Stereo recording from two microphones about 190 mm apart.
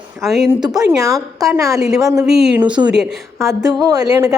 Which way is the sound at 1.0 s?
20° right (ahead or behind).